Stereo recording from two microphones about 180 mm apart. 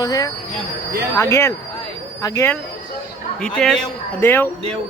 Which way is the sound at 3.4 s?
5° left (ahead or behind).